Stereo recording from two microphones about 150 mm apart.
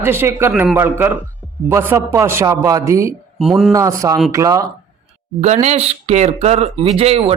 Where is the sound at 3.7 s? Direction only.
20° right (ahead or behind).